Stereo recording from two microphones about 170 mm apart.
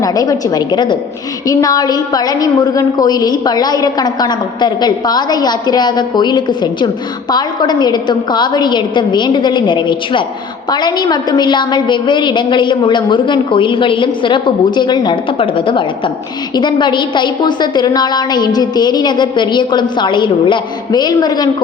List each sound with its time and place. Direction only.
0.0 s a woman's voice: 20° left (ahead or behind)